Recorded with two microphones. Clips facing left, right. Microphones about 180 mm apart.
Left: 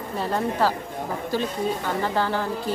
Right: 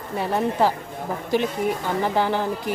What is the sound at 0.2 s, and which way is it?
Speech, 15° right (ahead or behind).